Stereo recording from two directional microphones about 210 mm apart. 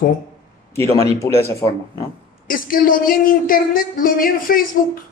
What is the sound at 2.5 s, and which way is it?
Speech, 40° left (ahead or behind).